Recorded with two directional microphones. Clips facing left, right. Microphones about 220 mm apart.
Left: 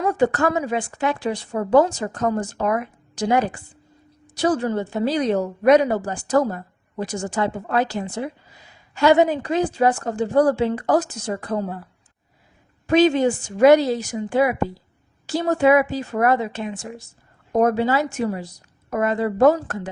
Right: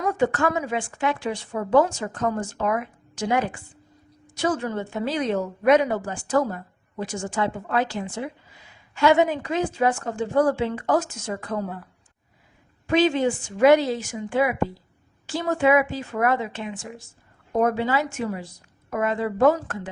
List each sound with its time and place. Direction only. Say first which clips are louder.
0.0 s a woman's voice: left 3 dB; 35° left (ahead or behind)
12.9 s a woman's voice: left 4 dB; 40° left (ahead or behind)